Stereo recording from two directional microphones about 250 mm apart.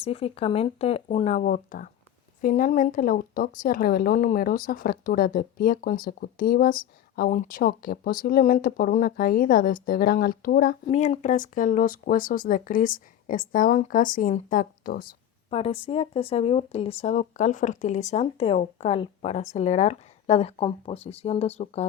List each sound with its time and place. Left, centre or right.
0.0 s a woman's voice: left
10.8 s a woman's voice: left
15.4 s speech: left